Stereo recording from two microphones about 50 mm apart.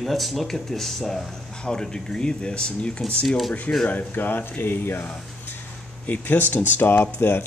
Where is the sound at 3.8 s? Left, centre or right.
Left.